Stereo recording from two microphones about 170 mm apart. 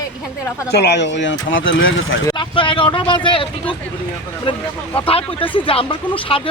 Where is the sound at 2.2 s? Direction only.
25° left (ahead or behind).